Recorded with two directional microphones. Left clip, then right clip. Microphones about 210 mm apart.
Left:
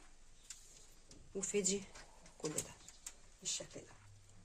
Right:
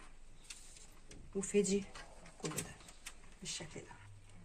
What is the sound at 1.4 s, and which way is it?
Speech, 55° left (ahead or behind).